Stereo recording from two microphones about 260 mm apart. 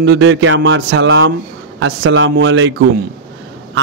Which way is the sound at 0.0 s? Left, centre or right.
Right.